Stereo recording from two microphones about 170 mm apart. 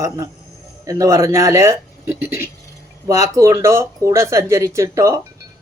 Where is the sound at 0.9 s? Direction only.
20° right (ahead or behind).